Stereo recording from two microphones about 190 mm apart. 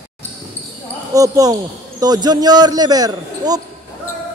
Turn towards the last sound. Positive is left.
turn(degrees=-20)  # may be behind; listen again after turning